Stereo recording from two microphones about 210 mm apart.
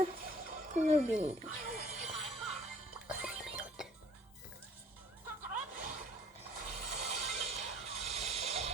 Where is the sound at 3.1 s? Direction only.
5° right (ahead or behind).